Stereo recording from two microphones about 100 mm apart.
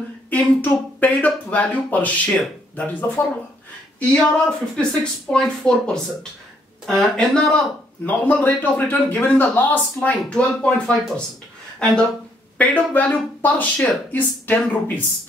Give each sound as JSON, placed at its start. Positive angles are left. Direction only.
{"t": 0.3, "sound": "speech", "side_deg": 15}
{"t": 12.5, "sound": "speech", "side_deg": 15}